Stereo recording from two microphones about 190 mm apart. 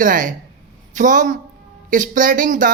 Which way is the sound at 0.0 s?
45° right (ahead or behind).